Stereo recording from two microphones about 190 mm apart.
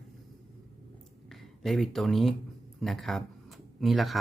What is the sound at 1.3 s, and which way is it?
Speech, centre (ahead or behind).